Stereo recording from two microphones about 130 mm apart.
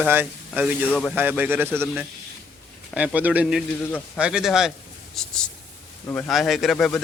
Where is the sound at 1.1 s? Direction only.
15° right (ahead or behind).